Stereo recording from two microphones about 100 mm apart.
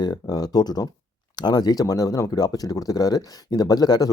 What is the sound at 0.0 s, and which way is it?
Speech, 40° left (ahead or behind).